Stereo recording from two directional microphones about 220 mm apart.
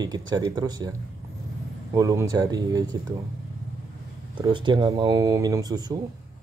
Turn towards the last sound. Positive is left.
turn(degrees=-20)  # may be behind; listen again after turning